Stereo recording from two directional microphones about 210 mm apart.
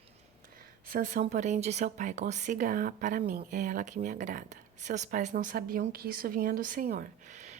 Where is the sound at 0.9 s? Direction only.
40° right (ahead or behind).